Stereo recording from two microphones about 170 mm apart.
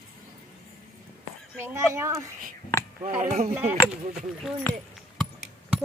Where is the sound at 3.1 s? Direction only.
45° right (ahead or behind).